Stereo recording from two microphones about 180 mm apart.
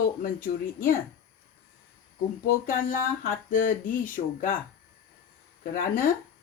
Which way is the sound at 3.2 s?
45° left (ahead or behind).